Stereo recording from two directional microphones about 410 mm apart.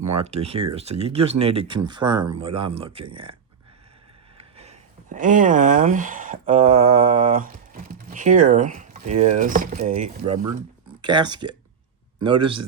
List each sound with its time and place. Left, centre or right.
0.0 s speech: right
0.3 s speech: centre
4.5 s speech: centre